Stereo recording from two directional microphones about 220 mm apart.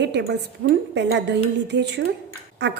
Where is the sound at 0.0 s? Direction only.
50° right (ahead or behind).